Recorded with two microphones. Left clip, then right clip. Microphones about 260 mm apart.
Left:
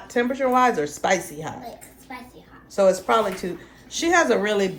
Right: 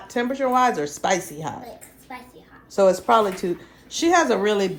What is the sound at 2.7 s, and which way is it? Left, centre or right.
Speech, centre.